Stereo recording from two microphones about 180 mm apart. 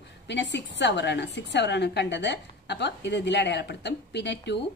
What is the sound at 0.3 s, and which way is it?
A woman's voice, 75° left (ahead or behind).